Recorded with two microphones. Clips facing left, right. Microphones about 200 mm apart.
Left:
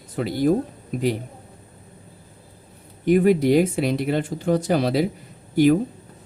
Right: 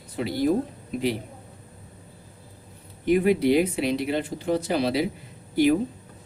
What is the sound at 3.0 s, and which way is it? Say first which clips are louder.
Speech: left 3 dB; 45° left (ahead or behind).